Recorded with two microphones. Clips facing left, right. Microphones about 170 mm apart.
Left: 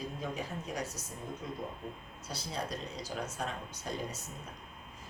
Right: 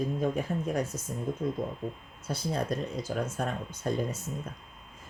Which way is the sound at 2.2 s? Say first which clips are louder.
Right 8 dB; 50° right (ahead or behind).